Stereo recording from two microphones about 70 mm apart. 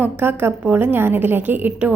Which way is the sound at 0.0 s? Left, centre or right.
Right.